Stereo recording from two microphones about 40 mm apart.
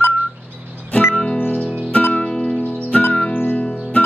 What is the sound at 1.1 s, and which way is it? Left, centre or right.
Music, left.